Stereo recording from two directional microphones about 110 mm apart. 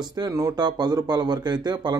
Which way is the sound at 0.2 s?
40° right (ahead or behind).